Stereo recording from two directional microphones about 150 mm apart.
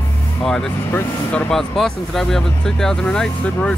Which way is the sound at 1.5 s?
Centre (ahead or behind).